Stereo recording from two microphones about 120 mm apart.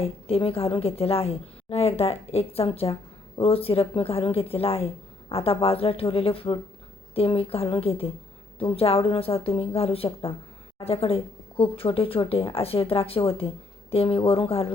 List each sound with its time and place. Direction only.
0.0 s a woman's voice: 55° left (ahead or behind)